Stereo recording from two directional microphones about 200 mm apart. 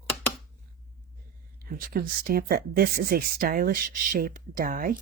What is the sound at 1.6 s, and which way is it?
Speech, 45° right (ahead or behind).